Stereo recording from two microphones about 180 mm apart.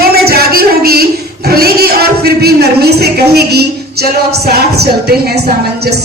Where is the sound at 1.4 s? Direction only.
60° right (ahead or behind).